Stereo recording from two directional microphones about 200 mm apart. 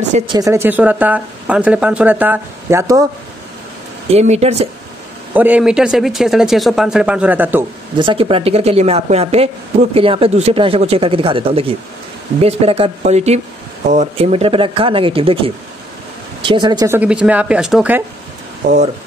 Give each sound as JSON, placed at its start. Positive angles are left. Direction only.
{"t": 0.3, "sound": "speech", "side_deg": -15}
{"t": 4.1, "sound": "speech", "side_deg": -35}
{"t": 5.3, "sound": "speech", "side_deg": -10}
{"t": 8.0, "sound": "a man's voice", "side_deg": -25}
{"t": 18.6, "sound": "speech", "side_deg": -40}